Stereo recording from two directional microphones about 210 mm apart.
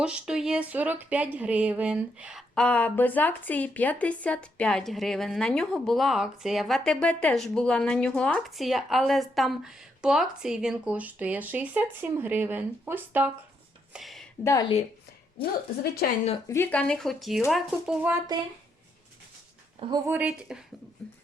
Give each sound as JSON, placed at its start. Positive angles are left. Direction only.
{"t": 0.0, "sound": "speech", "side_deg": -5}
{"t": 13.9, "sound": "a sound", "side_deg": 0}
{"t": 14.4, "sound": "a woman's voice", "side_deg": 15}
{"t": 16.5, "sound": "speech", "side_deg": 10}
{"t": 19.9, "sound": "speech", "side_deg": -10}
{"t": 21.0, "sound": "a sound", "side_deg": 0}